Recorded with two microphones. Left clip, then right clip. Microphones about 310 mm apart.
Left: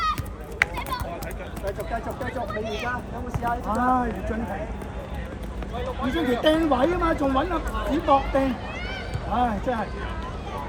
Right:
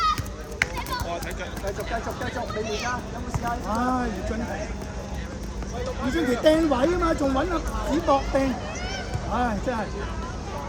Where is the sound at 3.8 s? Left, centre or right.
Centre.